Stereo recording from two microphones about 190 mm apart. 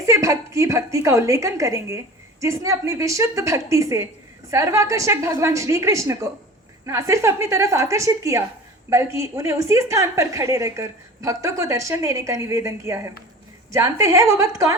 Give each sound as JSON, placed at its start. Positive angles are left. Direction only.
{"t": 0.0, "sound": "a woman's voice", "side_deg": -15}